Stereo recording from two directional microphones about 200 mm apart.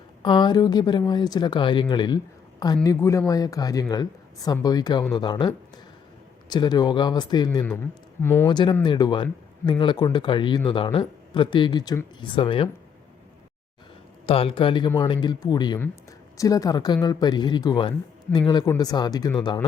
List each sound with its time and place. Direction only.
0.2 s speech: 25° left (ahead or behind)
8.4 s speech: 20° left (ahead or behind)
14.3 s speech: 30° left (ahead or behind)